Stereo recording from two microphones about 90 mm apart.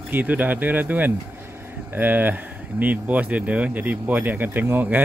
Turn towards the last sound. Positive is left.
turn(degrees=-20)  # may be behind; listen again after turning